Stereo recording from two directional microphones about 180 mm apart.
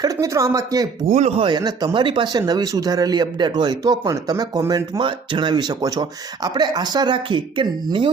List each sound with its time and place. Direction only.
0.0 s speech: 20° right (ahead or behind)
1.1 s speech: 40° right (ahead or behind)
1.5 s speech: 25° right (ahead or behind)